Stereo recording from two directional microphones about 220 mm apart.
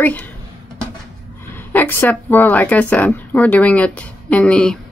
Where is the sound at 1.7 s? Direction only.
10° left (ahead or behind).